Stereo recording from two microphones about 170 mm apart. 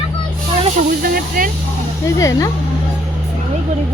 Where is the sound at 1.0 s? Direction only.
60° right (ahead or behind).